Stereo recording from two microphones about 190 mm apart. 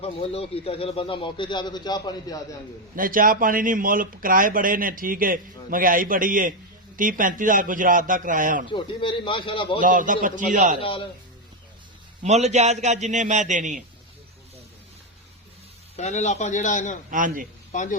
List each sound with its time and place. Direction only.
0.0 s a man's voice: 30° left (ahead or behind)
2.9 s a man's voice: 45° right (ahead or behind)
8.7 s a man's voice: 25° left (ahead or behind)
9.8 s a man's voice: 45° right (ahead or behind)
10.8 s a man's voice: 30° left (ahead or behind)
12.2 s a man's voice: 35° right (ahead or behind)
16.0 s a man's voice: 35° left (ahead or behind)
17.1 s a man's voice: 45° right (ahead or behind)